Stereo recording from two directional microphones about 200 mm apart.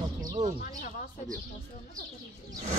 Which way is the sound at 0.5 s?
45° left (ahead or behind).